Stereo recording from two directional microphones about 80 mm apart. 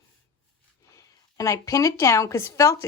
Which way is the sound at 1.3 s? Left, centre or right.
Left.